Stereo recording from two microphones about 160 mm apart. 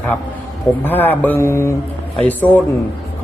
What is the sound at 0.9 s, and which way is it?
A man's voice, 10° left (ahead or behind).